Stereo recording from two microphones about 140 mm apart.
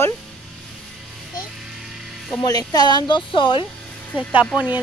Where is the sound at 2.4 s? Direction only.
30° left (ahead or behind).